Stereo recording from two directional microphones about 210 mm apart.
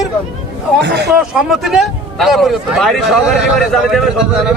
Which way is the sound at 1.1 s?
Centre (ahead or behind).